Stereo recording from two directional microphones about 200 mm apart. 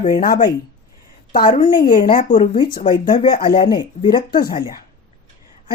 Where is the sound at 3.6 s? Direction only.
20° left (ahead or behind).